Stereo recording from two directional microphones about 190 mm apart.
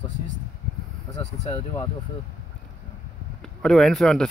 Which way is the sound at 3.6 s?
Centre (ahead or behind).